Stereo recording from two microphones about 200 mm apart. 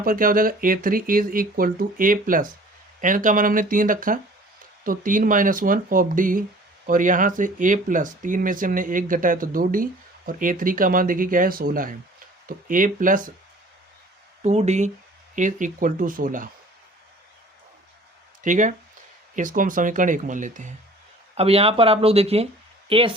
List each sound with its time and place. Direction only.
0.0 s speech: 45° right (ahead or behind)
14.4 s speech: 35° right (ahead or behind)
18.4 s speech: 40° right (ahead or behind)